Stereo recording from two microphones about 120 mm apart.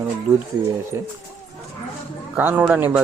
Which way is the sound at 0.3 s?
20° right (ahead or behind).